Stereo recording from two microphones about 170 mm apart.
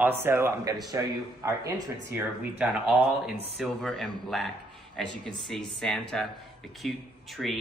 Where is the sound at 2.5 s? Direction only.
5° right (ahead or behind).